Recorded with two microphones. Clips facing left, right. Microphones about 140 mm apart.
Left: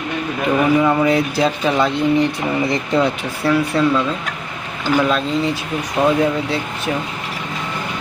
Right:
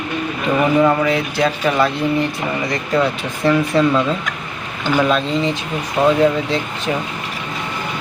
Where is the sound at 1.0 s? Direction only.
30° left (ahead or behind).